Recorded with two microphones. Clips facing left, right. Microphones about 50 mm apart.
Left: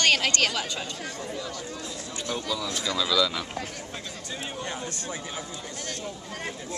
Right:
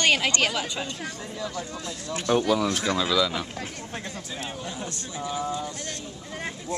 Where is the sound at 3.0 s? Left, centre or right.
Right.